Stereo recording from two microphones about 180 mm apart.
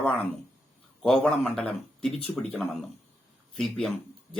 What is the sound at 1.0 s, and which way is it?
Speech, centre (ahead or behind).